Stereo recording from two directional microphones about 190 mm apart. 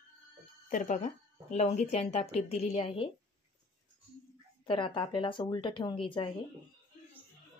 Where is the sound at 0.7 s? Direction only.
45° left (ahead or behind).